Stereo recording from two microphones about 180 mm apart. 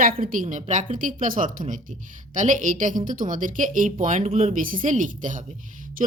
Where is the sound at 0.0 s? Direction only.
55° right (ahead or behind).